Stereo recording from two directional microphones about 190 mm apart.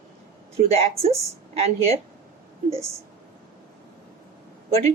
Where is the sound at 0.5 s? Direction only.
35° right (ahead or behind).